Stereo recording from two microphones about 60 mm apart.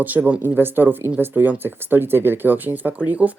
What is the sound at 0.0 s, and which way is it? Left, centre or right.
Speech, right.